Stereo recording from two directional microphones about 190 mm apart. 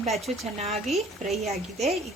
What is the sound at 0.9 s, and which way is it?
A woman's voice, centre (ahead or behind).